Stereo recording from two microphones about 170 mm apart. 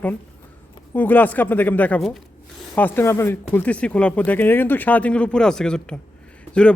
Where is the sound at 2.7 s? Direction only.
10° left (ahead or behind).